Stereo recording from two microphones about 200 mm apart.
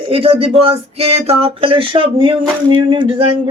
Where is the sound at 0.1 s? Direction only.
25° right (ahead or behind).